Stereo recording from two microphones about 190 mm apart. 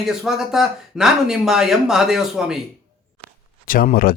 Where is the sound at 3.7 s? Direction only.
50° left (ahead or behind).